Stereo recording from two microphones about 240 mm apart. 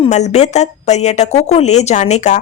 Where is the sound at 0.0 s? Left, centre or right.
Left.